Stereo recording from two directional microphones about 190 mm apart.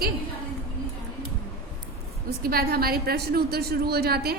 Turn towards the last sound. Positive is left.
turn(degrees=-55)  # may be behind; listen again after turning